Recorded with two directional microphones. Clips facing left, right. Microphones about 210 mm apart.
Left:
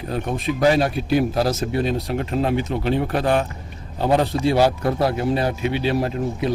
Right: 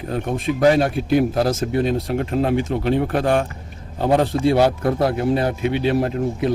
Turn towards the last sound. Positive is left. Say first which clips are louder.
# right 2 dB
turn(degrees=-55)  # may be behind; listen again after turning